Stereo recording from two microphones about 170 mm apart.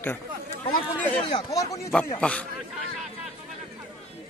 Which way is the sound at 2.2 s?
5° left (ahead or behind).